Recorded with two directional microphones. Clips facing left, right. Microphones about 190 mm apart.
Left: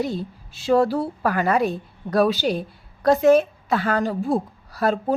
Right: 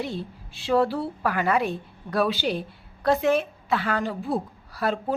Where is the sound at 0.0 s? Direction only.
40° left (ahead or behind).